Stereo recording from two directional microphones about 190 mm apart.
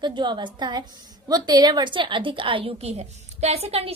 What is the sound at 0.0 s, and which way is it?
A woman's voice, 25° right (ahead or behind).